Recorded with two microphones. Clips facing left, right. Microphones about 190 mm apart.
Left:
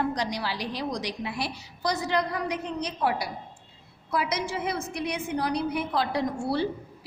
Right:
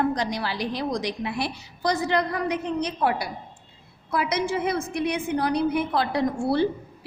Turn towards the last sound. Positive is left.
turn(degrees=-55)  # may be behind; listen again after turning